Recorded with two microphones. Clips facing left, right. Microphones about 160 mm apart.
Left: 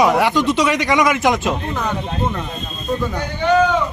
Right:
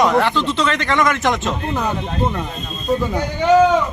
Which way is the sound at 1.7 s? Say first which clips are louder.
Right 1 dB; 15° right (ahead or behind).